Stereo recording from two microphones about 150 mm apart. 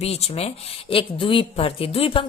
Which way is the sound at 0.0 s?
45° left (ahead or behind).